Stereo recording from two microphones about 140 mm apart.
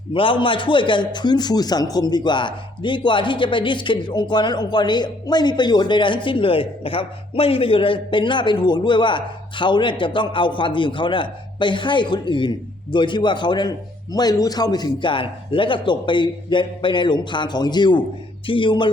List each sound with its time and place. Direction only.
0.1 s a man's voice: 40° left (ahead or behind)